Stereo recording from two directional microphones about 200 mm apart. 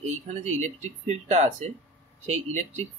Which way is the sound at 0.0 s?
35° right (ahead or behind).